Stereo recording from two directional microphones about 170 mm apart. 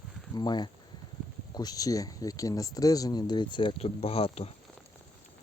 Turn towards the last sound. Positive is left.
turn(degrees=35)  # may be behind; listen again after turning